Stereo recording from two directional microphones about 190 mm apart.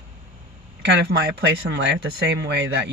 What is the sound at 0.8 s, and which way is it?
Speech, 65° right (ahead or behind).